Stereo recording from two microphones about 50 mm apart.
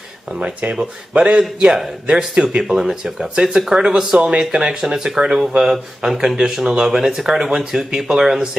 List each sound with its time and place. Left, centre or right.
0.4 s speech: right; by 8.4 s centre